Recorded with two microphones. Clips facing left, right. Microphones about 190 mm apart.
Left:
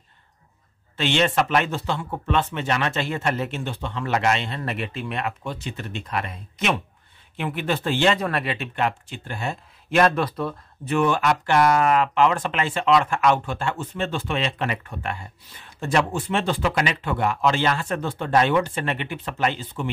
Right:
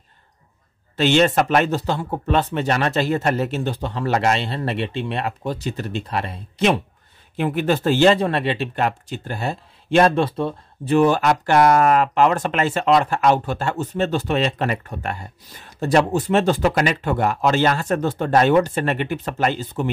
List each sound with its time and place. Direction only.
0.9 s speech: 40° right (ahead or behind)
8.7 s speech: 40° right (ahead or behind)